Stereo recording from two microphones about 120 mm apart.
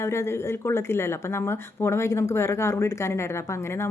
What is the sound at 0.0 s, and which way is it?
Speech, 25° left (ahead or behind).